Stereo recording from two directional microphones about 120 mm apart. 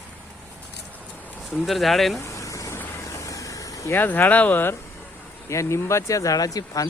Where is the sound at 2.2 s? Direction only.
25° left (ahead or behind).